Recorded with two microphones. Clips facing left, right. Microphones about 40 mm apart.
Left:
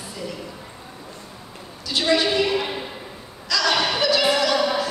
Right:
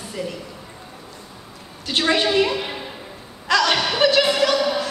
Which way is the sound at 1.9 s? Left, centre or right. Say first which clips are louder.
Right 1 dB; right.